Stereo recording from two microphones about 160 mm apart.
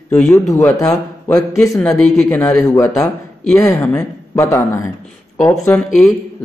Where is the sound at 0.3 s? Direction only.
20° left (ahead or behind).